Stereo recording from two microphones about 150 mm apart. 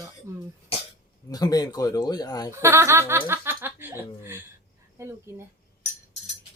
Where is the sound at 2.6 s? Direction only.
15° right (ahead or behind).